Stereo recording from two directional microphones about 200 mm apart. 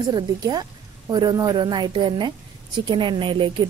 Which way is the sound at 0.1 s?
20° right (ahead or behind).